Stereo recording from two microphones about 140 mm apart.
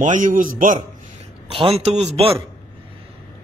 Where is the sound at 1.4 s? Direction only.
40° right (ahead or behind).